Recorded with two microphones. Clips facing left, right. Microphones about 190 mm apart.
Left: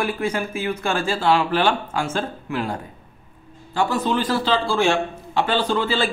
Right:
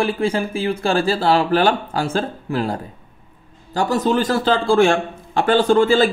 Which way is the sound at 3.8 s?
40° right (ahead or behind).